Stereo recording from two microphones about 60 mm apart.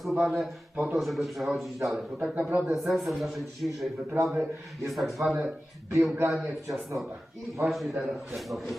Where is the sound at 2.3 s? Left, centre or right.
Right.